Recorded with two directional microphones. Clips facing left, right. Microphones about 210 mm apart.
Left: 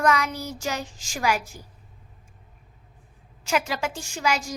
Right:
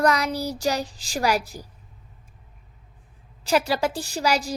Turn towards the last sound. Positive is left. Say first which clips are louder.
# right 3 dB
turn(degrees=-35)  # may be behind; listen again after turning